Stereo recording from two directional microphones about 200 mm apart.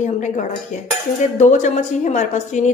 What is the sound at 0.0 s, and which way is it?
A woman's voice, 35° left (ahead or behind).